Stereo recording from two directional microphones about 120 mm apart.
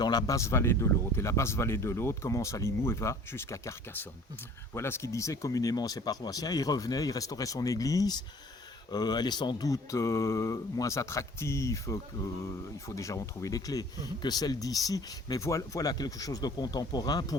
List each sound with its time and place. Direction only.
0.0 s speech: 35° left (ahead or behind)